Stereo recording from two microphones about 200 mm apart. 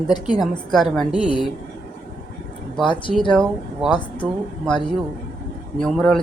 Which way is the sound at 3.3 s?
Centre (ahead or behind).